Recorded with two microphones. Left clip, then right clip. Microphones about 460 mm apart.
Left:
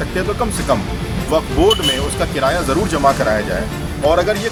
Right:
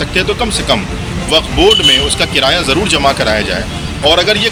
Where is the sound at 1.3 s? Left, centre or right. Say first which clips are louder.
Right 5 dB; left.